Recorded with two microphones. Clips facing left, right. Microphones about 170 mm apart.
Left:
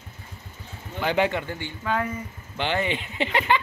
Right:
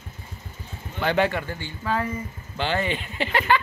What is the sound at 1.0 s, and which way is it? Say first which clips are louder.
Speech: right 1 dB; 15° left (ahead or behind).